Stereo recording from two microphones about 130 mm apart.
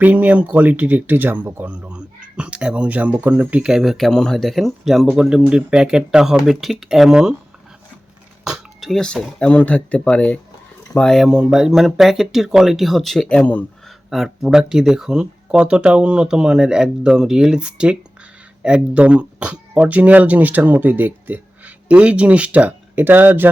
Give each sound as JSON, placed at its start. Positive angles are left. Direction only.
{"t": 0.0, "sound": "speech", "side_deg": -10}
{"t": 8.4, "sound": "speech", "side_deg": 0}
{"t": 14.1, "sound": "speech", "side_deg": 0}